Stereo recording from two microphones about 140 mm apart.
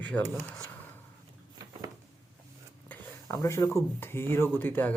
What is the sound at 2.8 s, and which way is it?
Speech, 20° left (ahead or behind).